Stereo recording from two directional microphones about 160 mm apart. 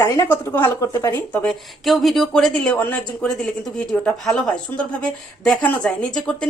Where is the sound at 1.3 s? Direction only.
5° left (ahead or behind).